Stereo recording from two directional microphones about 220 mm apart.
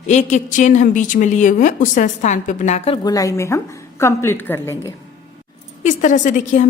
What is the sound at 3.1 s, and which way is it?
A woman's voice, 15° left (ahead or behind).